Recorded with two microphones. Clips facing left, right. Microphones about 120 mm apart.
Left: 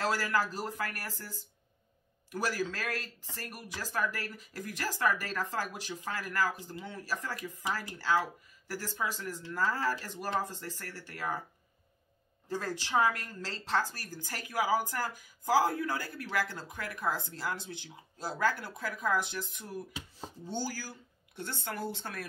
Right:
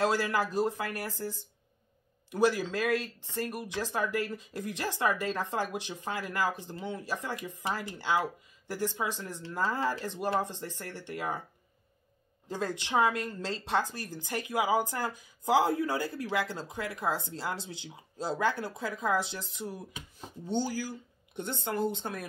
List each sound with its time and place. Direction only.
0.0 s a woman's voice: 20° right (ahead or behind)
12.4 s a woman's voice: 20° right (ahead or behind)